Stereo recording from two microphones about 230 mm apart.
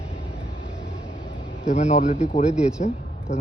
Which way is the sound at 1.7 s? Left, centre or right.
Left.